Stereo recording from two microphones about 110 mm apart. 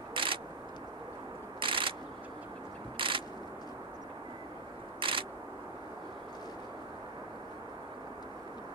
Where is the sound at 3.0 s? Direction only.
50° right (ahead or behind).